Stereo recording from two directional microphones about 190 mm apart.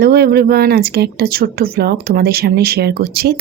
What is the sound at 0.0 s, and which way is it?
Speech, 55° right (ahead or behind).